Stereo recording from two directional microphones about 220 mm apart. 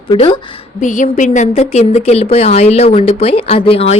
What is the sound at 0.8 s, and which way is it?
Speech, 35° left (ahead or behind).